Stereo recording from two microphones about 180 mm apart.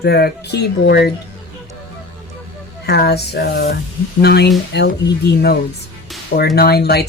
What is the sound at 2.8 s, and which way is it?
Speech, 65° left (ahead or behind).